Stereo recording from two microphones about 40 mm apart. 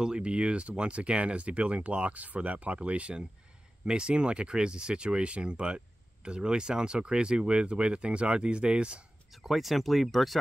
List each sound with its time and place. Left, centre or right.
0.0 s speech: right
9.3 s speech: centre